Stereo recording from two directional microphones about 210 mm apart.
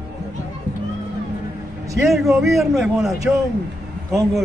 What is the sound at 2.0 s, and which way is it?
A man's voice, centre (ahead or behind).